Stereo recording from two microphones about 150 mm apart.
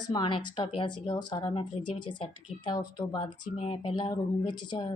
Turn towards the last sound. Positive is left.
turn(degrees=30)  # may be behind; listen again after turning